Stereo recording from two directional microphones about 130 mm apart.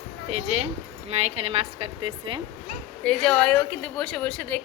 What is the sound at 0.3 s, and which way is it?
A woman's voice, 50° right (ahead or behind).